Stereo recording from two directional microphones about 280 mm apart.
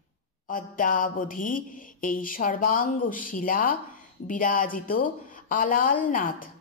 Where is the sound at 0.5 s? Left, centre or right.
Left.